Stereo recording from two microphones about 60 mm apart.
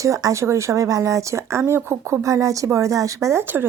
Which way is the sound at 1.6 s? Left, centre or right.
Right.